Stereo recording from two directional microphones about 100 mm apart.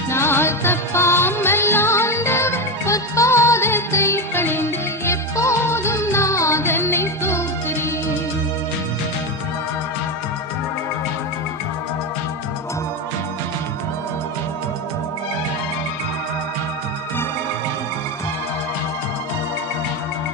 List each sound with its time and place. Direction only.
0.1 s music: 25° left (ahead or behind)